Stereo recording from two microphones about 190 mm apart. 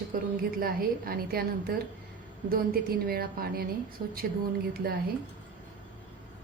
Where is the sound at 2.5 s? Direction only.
50° right (ahead or behind).